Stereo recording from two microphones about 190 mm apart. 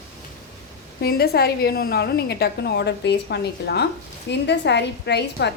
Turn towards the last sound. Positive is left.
turn(degrees=65)  # may be behind; listen again after turning